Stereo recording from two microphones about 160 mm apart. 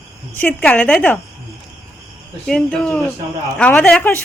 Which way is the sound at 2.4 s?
5° left (ahead or behind).